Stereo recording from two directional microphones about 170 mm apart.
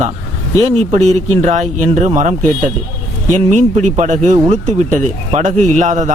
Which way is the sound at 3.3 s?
45° right (ahead or behind).